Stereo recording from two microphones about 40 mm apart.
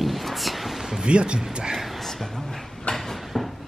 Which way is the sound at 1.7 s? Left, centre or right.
Centre.